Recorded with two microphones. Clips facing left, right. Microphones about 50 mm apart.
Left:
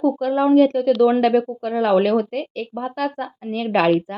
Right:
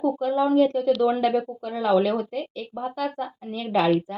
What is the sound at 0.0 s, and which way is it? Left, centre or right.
Speech, left.